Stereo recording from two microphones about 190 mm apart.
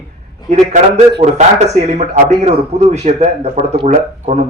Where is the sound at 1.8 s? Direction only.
35° right (ahead or behind).